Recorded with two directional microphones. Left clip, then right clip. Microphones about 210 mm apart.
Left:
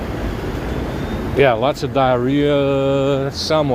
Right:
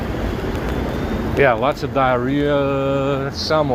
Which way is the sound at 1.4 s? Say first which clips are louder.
Left 1 dB; 40° left (ahead or behind).